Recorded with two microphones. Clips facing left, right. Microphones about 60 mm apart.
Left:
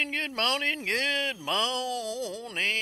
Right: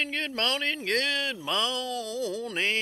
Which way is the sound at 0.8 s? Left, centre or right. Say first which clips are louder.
Right 4 dB; left.